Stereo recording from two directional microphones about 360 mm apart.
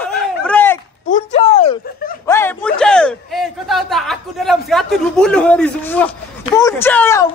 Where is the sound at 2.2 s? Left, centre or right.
Centre.